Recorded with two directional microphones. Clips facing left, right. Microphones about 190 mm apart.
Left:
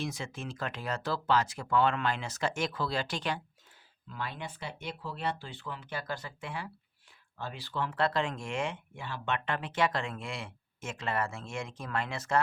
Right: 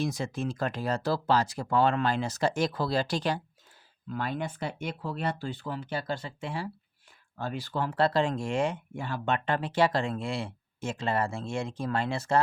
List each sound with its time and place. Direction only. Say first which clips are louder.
0.0 s speech: right 7 dB; 40° right (ahead or behind)
4.1 s speech: right 7 dB; 45° right (ahead or behind); by 6.7 s 30° right (ahead or behind)
7.3 s speech: right 4 dB; 45° right (ahead or behind)